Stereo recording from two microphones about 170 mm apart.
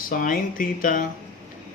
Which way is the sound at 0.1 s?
50° left (ahead or behind).